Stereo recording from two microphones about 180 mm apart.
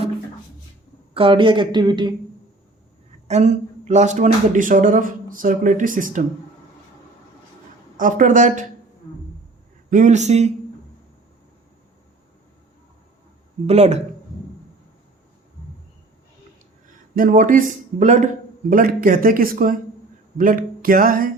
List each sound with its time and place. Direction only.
1.1 s speech: 30° right (ahead or behind)
3.2 s speech: 40° right (ahead or behind)
7.9 s speech: 45° right (ahead or behind)
9.9 s a man's voice: 45° right (ahead or behind)
13.7 s a man's voice: 35° right (ahead or behind)
17.2 s speech: 50° right (ahead or behind)